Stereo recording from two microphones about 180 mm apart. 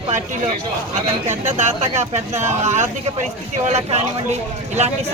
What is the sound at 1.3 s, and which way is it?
Speech, 40° right (ahead or behind).